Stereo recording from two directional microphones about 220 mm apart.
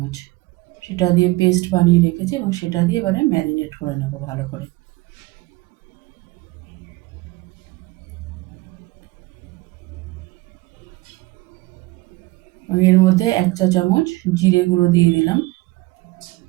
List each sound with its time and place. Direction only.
0.8 s a woman's voice: 15° left (ahead or behind)
12.8 s a woman's voice: 15° left (ahead or behind)